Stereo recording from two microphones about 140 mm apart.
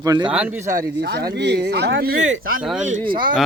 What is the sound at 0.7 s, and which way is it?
Speech, 75° right (ahead or behind).